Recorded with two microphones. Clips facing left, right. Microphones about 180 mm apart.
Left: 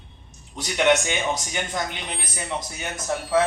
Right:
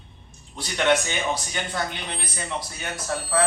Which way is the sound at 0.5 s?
20° left (ahead or behind).